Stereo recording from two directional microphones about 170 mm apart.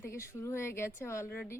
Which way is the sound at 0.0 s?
15° left (ahead or behind).